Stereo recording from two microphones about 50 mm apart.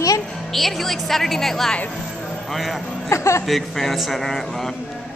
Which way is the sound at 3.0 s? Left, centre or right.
Left.